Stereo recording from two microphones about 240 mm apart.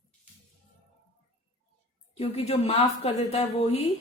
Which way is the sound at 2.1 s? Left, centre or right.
Left.